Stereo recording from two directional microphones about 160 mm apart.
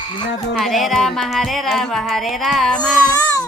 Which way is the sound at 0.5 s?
Centre (ahead or behind).